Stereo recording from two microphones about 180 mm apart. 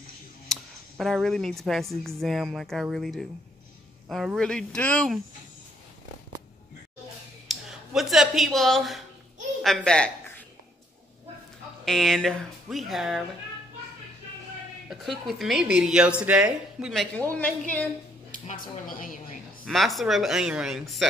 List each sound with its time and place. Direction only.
0.5 s speech: centre (ahead or behind)
7.4 s speech: centre (ahead or behind)
11.8 s speech: centre (ahead or behind)
14.9 s speech: centre (ahead or behind)
17.3 s a woman's voice: 10° left (ahead or behind)
18.3 s a woman's voice: 50° left (ahead or behind)
19.6 s speech: centre (ahead or behind)